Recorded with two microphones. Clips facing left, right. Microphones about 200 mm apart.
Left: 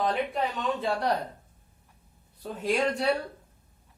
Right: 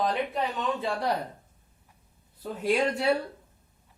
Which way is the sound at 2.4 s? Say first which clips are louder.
Right 1 dB; 5° right (ahead or behind).